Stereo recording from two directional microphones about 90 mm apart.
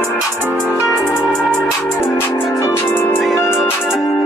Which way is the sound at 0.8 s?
35° left (ahead or behind).